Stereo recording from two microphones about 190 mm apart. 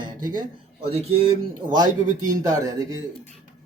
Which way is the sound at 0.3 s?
45° right (ahead or behind).